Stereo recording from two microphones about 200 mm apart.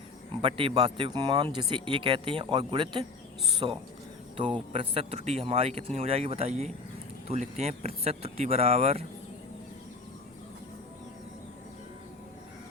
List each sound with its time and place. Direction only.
0.4 s speech: 25° right (ahead or behind)